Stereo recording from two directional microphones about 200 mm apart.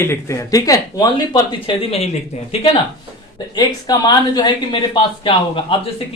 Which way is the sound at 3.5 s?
20° left (ahead or behind).